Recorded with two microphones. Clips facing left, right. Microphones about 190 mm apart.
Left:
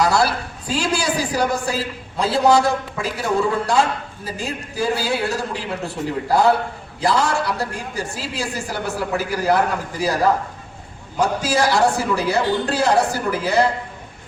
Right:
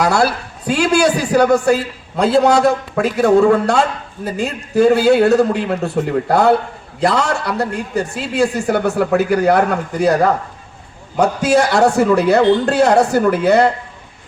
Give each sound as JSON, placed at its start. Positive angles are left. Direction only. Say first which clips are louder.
{"t": 0.0, "sound": "a woman's voice", "louder": "right 3 dB", "side_deg": -55}
{"t": 0.7, "sound": "a man's voice", "louder": "right 8 dB", "side_deg": -65}
{"t": 11.2, "sound": "a man's voice", "louder": "right 6 dB", "side_deg": -65}